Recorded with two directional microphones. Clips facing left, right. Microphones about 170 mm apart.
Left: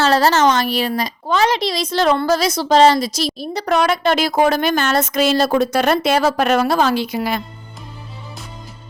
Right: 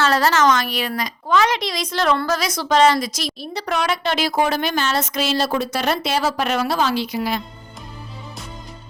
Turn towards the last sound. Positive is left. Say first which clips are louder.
# left 3 dB
turn(degrees=55)  # may be behind; listen again after turning